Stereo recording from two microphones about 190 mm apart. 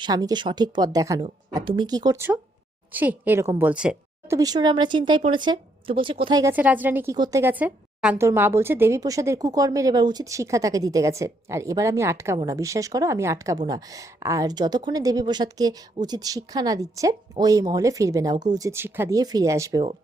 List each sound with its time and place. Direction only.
0.0 s a woman's voice: 20° right (ahead or behind)
4.4 s a woman's voice: 20° right (ahead or behind)